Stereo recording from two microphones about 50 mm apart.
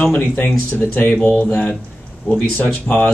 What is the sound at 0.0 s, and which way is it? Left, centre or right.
Speech, left.